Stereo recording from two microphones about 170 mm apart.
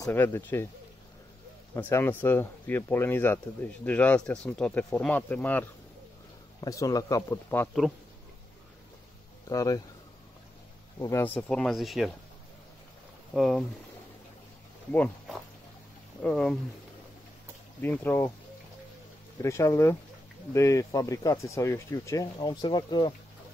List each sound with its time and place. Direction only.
0.0 s speech: 15° left (ahead or behind)
1.7 s speech: 15° left (ahead or behind)
6.6 s speech: 20° left (ahead or behind)
9.5 s speech: 20° left (ahead or behind)
11.0 s speech: 15° left (ahead or behind); by 12.1 s centre (ahead or behind)
13.3 s speech: centre (ahead or behind)
14.9 s speech: 5° left (ahead or behind)
17.8 s speech: 10° left (ahead or behind)
19.4 s speech: 15° left (ahead or behind)